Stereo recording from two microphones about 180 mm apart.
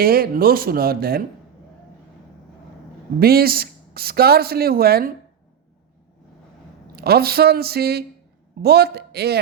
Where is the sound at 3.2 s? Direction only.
60° right (ahead or behind).